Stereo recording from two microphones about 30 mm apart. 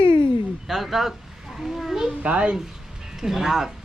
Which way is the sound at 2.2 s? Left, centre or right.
Right.